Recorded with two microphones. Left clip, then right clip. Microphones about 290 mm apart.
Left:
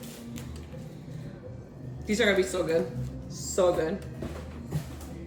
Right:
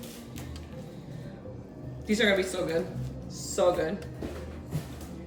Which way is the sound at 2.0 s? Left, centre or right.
Left.